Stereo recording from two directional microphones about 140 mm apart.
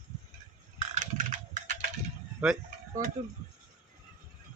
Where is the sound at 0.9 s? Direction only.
60° right (ahead or behind).